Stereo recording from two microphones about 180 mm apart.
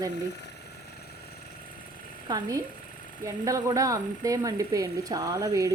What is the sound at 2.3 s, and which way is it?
Speech, 20° right (ahead or behind).